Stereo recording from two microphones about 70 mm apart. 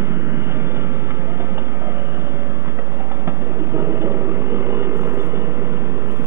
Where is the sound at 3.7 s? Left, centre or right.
Right.